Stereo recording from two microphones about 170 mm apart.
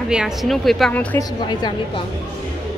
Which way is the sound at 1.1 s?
25° left (ahead or behind).